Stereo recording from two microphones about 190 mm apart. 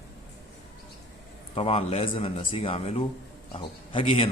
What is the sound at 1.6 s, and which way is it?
A man's voice, 30° left (ahead or behind).